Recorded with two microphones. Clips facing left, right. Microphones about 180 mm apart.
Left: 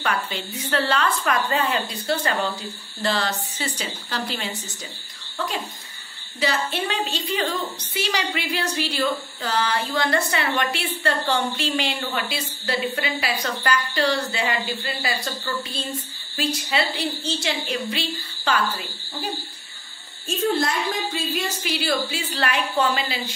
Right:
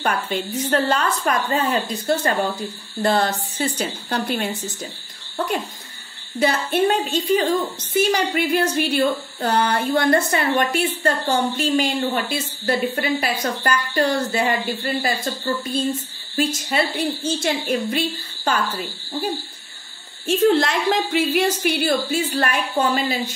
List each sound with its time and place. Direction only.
0.0 s a woman's voice: 45° right (ahead or behind)
6.4 s a woman's voice: 50° right (ahead or behind)
16.3 s a woman's voice: 50° right (ahead or behind)
20.2 s a woman's voice: 80° right; by 23.1 s 45° right (ahead or behind)